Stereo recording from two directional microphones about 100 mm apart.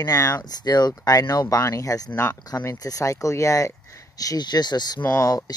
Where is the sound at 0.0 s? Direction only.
35° left (ahead or behind).